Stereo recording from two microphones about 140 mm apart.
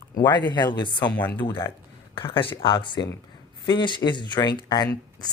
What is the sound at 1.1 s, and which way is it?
Speech, 10° left (ahead or behind).